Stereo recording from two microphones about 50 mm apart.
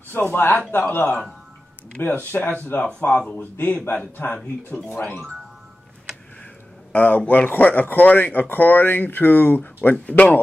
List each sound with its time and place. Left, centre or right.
0.1 s speech: left
3.3 s speech: left
6.9 s speech: left